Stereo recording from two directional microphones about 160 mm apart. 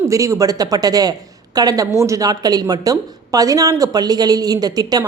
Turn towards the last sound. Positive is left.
turn(degrees=-25)  # may be behind; listen again after turning